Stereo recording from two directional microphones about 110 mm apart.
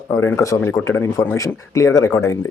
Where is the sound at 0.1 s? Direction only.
25° left (ahead or behind).